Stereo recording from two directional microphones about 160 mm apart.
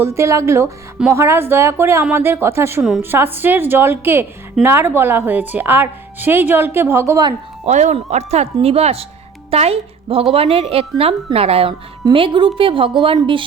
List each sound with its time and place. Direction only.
0.0 s a woman's voice: 15° right (ahead or behind)
7.6 s a woman's voice: 45° right (ahead or behind)